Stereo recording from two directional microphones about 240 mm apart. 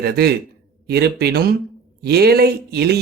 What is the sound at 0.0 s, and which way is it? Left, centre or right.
Speech, right.